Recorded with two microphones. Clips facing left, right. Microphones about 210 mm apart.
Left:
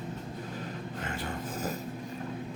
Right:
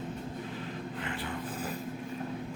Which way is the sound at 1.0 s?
45° left (ahead or behind).